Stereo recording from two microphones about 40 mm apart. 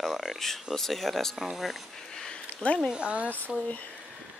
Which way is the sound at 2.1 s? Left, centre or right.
Centre.